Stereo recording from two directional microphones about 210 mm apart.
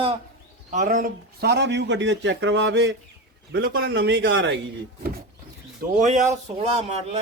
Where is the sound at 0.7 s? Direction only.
35° right (ahead or behind); by 2.9 s 60° right (ahead or behind).